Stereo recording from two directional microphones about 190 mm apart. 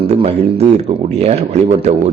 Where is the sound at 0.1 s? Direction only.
35° right (ahead or behind).